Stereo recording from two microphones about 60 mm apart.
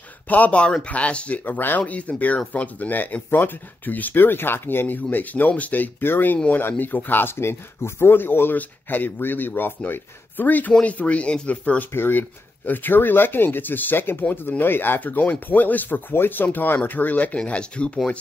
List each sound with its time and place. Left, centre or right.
0.3 s speech: left
11.9 s speech: left; by 18.1 s centre